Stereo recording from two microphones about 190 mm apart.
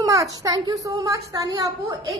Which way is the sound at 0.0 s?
20° right (ahead or behind).